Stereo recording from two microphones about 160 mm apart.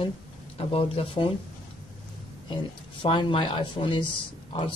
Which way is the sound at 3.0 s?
30° left (ahead or behind).